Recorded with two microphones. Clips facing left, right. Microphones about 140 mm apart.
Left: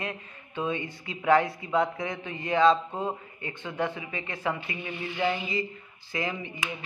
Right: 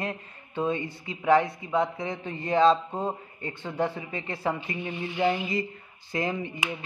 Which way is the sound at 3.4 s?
35° right (ahead or behind).